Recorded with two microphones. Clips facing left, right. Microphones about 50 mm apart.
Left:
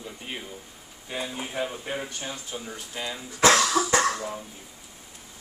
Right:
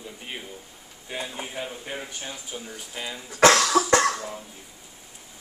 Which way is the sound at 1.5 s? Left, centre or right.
Centre.